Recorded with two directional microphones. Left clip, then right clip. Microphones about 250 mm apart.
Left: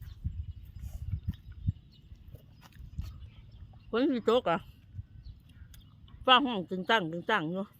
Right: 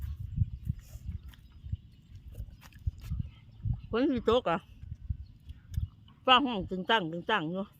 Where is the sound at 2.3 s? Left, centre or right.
Right.